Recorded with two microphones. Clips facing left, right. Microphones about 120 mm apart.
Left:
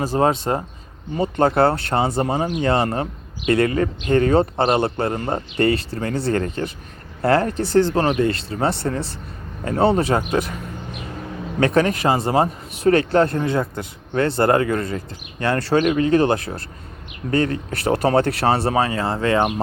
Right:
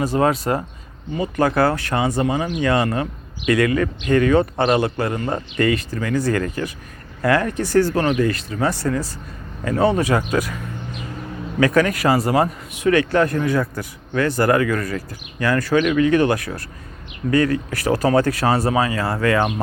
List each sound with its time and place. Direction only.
0.0 s speech: 30° left (ahead or behind)
11.6 s speech: 25° left (ahead or behind)